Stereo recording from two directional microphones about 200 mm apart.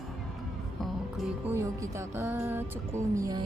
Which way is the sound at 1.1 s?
10° right (ahead or behind).